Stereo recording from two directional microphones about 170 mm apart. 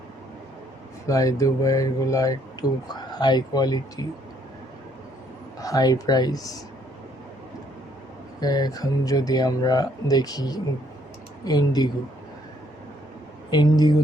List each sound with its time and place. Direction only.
1.0 s speech: 20° left (ahead or behind)
5.5 s speech: 20° left (ahead or behind)
8.4 s speech: 20° left (ahead or behind)
13.5 s speech: 25° left (ahead or behind)